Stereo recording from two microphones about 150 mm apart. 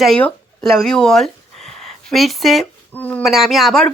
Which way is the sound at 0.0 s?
5° left (ahead or behind).